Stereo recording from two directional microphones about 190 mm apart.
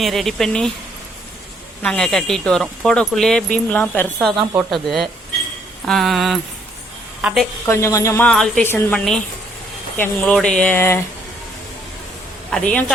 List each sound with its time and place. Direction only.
0.0 s speech: centre (ahead or behind)
1.8 s a woman's voice: 5° left (ahead or behind)
7.6 s speech: 15° left (ahead or behind)
8.3 s speech: 5° left (ahead or behind)
12.5 s speech: 5° left (ahead or behind)